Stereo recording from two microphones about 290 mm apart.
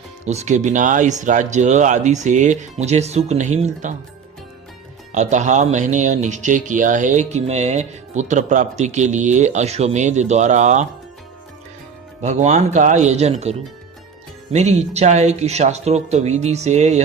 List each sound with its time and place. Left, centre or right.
0.3 s speech: right
5.1 s speech: right
12.2 s speech: right